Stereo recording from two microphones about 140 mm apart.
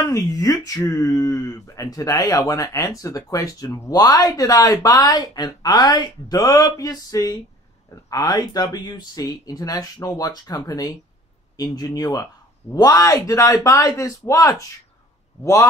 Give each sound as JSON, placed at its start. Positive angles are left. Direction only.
{"t": 0.0, "sound": "speech", "side_deg": 25}